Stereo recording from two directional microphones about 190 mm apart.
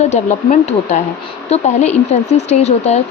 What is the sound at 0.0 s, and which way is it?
Speech, 35° left (ahead or behind).